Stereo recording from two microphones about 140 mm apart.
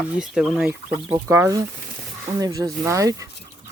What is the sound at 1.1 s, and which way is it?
Speech, 20° right (ahead or behind).